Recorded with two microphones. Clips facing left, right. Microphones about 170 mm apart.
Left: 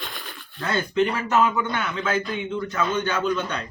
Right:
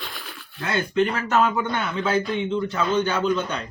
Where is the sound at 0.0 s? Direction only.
Centre (ahead or behind).